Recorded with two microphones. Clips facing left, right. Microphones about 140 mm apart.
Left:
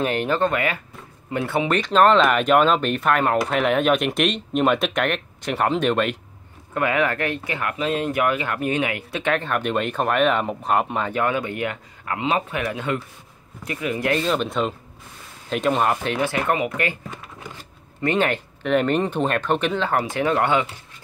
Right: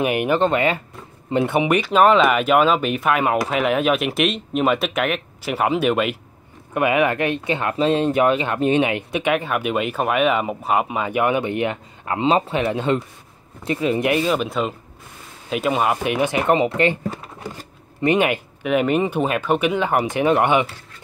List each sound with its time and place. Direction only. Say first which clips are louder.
0.0 s speech: right 3 dB; 15° right (ahead or behind)
1.8 s speech: even; 10° right (ahead or behind)
6.7 s speech: right 3 dB; 15° right (ahead or behind)
14.1 s speech: right 2 dB; 5° right (ahead or behind); by 17.2 s 25° right (ahead or behind)
18.0 s speech: right 3 dB; 15° right (ahead or behind)